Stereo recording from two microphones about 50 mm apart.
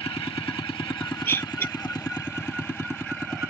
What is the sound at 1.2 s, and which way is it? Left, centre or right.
Vehicle, left.